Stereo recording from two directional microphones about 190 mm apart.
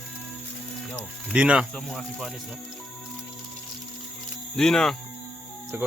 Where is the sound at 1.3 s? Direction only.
5° right (ahead or behind).